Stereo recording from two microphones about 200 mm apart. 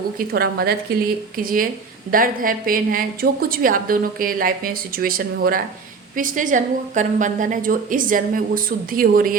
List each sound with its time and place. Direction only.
0.2 s a woman's voice: 50° right (ahead or behind)